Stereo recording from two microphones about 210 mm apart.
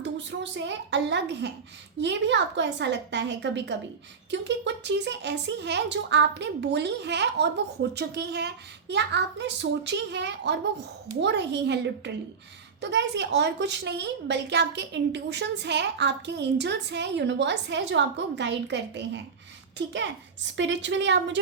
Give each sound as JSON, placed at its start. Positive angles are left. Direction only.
{"t": 0.0, "sound": "a woman's voice", "side_deg": -55}